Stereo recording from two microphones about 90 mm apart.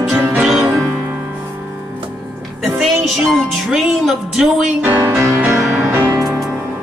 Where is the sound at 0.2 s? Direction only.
15° right (ahead or behind).